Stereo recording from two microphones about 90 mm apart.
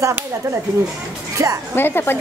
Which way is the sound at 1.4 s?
40° right (ahead or behind).